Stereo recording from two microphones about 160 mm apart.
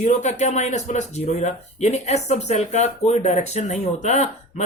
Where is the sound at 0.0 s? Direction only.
50° left (ahead or behind).